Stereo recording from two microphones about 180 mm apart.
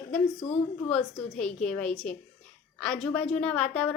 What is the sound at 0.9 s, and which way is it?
A woman's voice, 5° left (ahead or behind).